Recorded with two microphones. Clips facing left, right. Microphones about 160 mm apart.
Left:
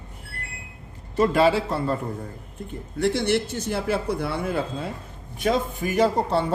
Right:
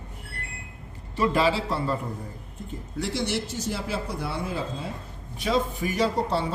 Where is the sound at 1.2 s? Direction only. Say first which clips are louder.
Left 4 dB; 50° left (ahead or behind).